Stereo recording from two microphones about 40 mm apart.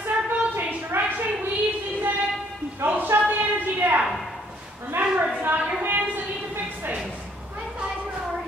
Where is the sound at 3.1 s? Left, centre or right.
Right.